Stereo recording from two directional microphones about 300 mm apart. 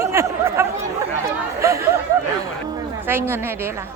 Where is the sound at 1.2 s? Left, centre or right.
Centre.